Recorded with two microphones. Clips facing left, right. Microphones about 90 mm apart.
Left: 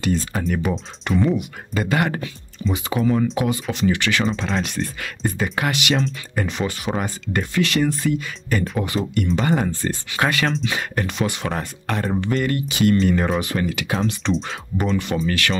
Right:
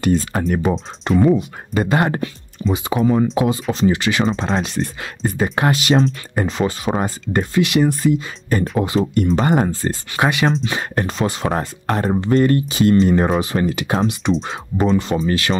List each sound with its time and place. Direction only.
0.0 s speech: 45° right (ahead or behind)
0.6 s speech: 30° right (ahead or behind)
4.4 s speech: 35° right (ahead or behind)
6.3 s speech: 25° right (ahead or behind)
7.6 s speech: 15° right (ahead or behind)
8.5 s speech: 35° right (ahead or behind)
10.1 s speech: 20° right (ahead or behind)
10.6 s speech: 35° right (ahead or behind)
14.2 s speech: 10° right (ahead or behind)
14.9 s speech: 30° right (ahead or behind)